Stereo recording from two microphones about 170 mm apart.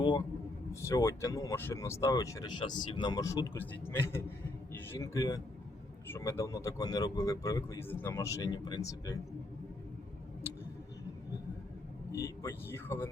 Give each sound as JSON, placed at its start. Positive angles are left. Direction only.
{"t": 0.7, "sound": "speech", "side_deg": 15}
{"t": 12.1, "sound": "speech", "side_deg": 15}